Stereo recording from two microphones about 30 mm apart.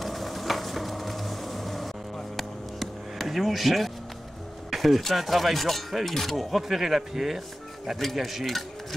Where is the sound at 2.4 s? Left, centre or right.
Centre.